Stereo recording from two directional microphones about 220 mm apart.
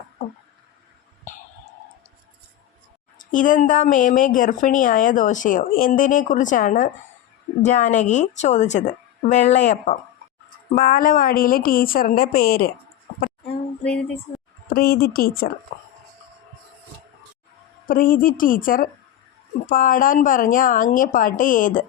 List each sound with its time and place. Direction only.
3.2 s a woman's voice: 35° left (ahead or behind)
13.8 s music: 5° left (ahead or behind)
14.7 s a woman's voice: 45° left (ahead or behind)
17.8 s a woman's voice: 40° left (ahead or behind)